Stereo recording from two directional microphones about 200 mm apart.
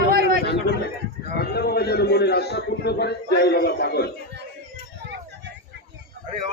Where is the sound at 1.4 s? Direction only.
50° left (ahead or behind).